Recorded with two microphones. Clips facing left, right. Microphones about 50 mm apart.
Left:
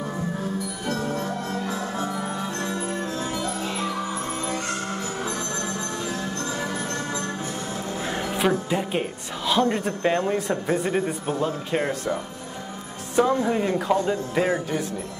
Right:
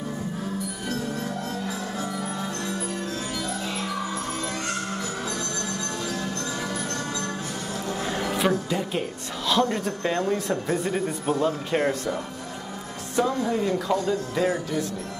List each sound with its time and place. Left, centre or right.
0.8 s music: left
9.5 s speech: left
11.2 s a man's voice: centre
13.1 s speech: left